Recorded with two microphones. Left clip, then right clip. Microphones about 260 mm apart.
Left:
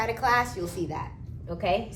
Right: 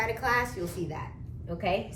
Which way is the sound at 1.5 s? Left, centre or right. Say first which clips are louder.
Left 3 dB; centre.